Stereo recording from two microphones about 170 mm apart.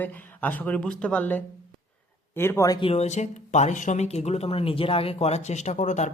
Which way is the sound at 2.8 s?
40° left (ahead or behind).